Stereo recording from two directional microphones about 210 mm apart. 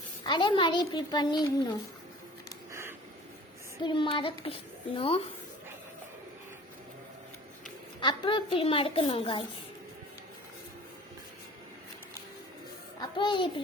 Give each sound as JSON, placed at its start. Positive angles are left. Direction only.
{"t": 0.3, "sound": "a child's voice", "side_deg": 20}
{"t": 3.8, "sound": "a child's voice", "side_deg": 25}
{"t": 8.0, "sound": "a child's voice", "side_deg": 25}
{"t": 13.0, "sound": "a child's voice", "side_deg": 20}